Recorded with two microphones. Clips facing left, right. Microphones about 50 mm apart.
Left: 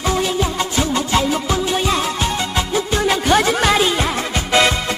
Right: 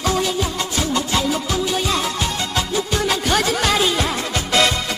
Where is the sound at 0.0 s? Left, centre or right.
Left.